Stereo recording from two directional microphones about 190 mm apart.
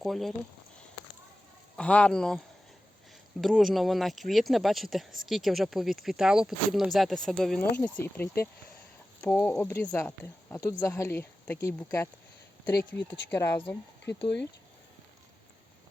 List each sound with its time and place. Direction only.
0.0 s speech: centre (ahead or behind)
1.7 s speech: 5° left (ahead or behind)
3.4 s speech: centre (ahead or behind)